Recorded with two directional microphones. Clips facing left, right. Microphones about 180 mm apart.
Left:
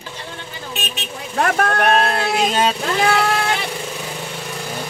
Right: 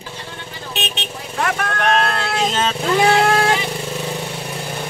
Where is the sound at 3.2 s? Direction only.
40° right (ahead or behind).